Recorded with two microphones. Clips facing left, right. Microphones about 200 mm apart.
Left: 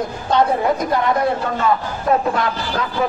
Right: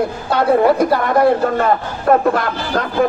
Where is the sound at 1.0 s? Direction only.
55° right (ahead or behind).